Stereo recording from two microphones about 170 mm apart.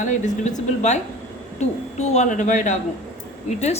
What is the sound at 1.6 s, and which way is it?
A woman's voice, 40° left (ahead or behind).